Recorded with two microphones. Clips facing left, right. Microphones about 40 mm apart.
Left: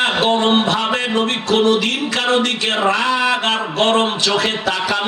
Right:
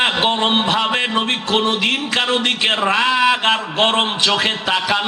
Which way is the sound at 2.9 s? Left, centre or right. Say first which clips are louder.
Right 1 dB; right.